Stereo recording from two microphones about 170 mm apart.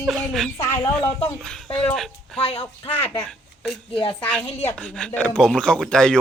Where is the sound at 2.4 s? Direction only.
35° left (ahead or behind).